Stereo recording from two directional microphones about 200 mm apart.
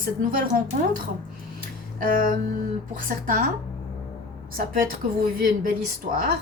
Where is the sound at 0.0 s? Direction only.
45° right (ahead or behind).